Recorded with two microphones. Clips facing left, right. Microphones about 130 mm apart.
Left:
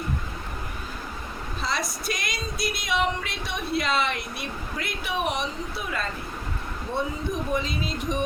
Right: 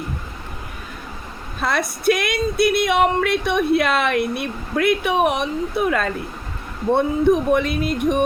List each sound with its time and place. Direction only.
1.6 s speech: 60° right (ahead or behind)